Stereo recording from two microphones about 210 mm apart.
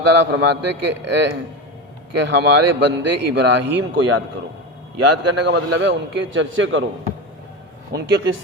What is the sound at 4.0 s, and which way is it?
Speech, 90° right.